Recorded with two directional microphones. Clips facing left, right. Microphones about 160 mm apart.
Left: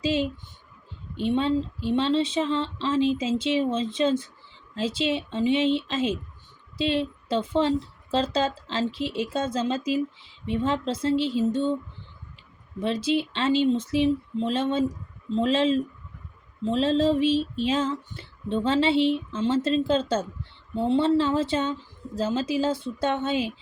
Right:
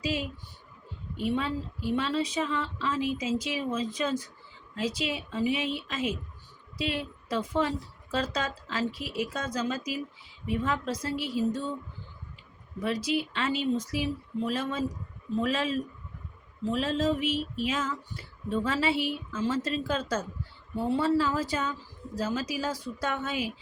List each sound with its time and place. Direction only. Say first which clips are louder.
0.0 s speech: left 7 dB; 25° left (ahead or behind)
12.8 s speech: left 4 dB; 25° left (ahead or behind)